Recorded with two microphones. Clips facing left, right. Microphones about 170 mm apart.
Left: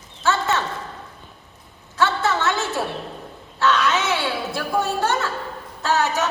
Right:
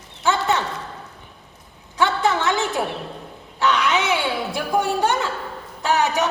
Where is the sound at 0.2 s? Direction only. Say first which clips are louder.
Right 1 dB; 15° right (ahead or behind).